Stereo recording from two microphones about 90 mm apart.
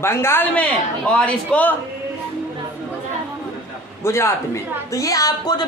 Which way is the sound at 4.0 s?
30° left (ahead or behind).